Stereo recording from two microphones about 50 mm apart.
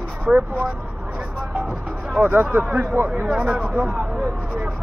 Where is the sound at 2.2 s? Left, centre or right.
Right.